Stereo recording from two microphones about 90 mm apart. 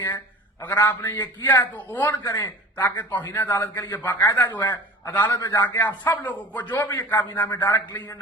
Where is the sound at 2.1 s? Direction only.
40° left (ahead or behind).